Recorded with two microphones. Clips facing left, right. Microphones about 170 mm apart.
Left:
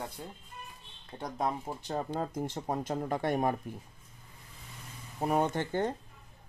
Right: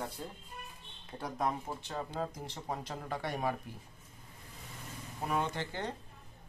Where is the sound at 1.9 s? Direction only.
45° left (ahead or behind).